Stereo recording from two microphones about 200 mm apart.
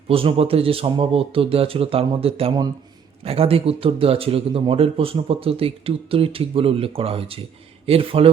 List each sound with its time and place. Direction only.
0.1 s speech: 30° right (ahead or behind)